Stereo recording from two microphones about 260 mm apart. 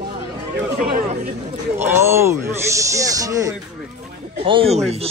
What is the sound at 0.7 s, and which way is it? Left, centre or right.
Speech, right.